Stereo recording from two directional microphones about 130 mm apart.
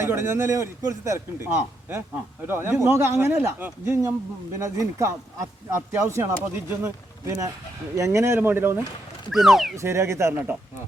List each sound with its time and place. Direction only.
0.0 s a man's voice: 20° right (ahead or behind)
9.3 s speech: centre (ahead or behind)
9.7 s a man's voice: 20° right (ahead or behind)